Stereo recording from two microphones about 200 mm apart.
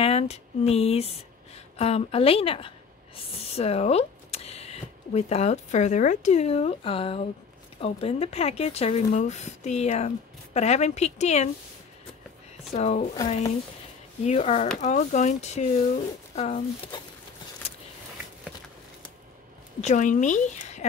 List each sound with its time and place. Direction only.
0.0 s a woman's voice: 30° left (ahead or behind)
12.7 s speech: 35° left (ahead or behind)
14.2 s speech: 35° left (ahead or behind)
17.6 s a sound: 30° left (ahead or behind)
19.8 s speech: 35° left (ahead or behind)